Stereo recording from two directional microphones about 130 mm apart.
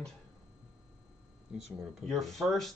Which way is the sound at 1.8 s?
Centre (ahead or behind).